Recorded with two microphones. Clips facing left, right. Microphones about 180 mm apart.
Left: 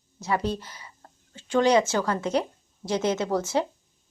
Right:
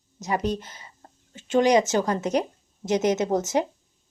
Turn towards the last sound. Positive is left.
turn(degrees=-20)  # may be behind; listen again after turning